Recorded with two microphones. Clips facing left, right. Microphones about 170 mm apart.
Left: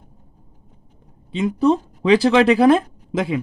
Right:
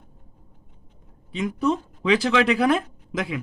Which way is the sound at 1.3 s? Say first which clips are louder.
Left 6 dB; 25° left (ahead or behind).